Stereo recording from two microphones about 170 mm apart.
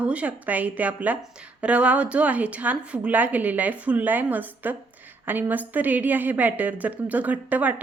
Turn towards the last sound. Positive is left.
turn(degrees=-10)  # may be behind; listen again after turning